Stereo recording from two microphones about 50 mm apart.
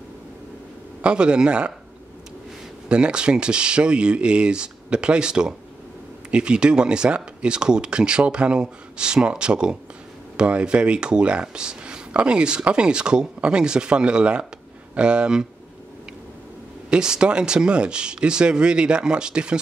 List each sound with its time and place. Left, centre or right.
1.0 s speech: centre
2.9 s speech: centre
16.9 s speech: centre